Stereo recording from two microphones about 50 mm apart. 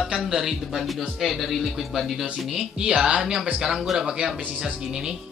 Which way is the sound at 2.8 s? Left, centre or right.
Right.